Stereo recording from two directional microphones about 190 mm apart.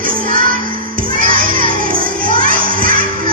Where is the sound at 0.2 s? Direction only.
50° right (ahead or behind).